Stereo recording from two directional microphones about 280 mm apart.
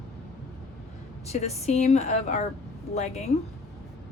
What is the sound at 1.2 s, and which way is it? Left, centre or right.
A woman's voice, left.